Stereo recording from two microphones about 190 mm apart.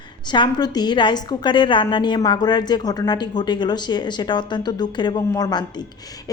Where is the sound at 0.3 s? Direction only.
25° left (ahead or behind).